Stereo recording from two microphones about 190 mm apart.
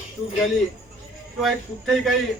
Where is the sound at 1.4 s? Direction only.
Centre (ahead or behind).